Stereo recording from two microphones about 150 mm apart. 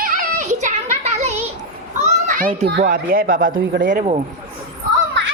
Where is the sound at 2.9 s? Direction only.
70° right (ahead or behind).